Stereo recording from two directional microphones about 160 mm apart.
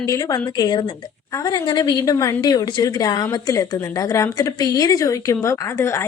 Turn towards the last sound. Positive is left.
turn(degrees=15)  # may be behind; listen again after turning